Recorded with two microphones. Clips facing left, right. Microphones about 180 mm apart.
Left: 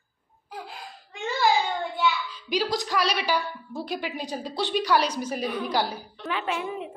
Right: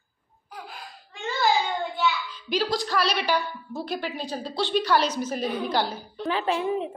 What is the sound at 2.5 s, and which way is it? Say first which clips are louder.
A woman's voice: right 1 dB; 15° left (ahead or behind).